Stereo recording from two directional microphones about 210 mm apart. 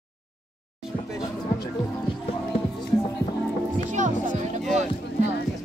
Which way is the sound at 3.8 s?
35° right (ahead or behind).